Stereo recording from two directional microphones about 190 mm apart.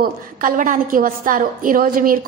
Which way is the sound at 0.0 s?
45° right (ahead or behind).